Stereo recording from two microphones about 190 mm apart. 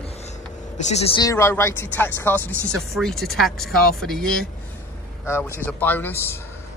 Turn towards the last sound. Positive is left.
turn(degrees=10)  # may be behind; listen again after turning